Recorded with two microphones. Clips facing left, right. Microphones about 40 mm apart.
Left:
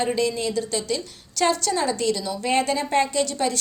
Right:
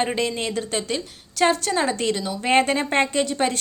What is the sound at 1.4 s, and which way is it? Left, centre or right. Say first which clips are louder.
A woman's voice: right 2 dB; right.